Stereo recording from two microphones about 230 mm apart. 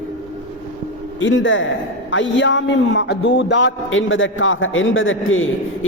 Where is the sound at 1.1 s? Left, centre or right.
Left.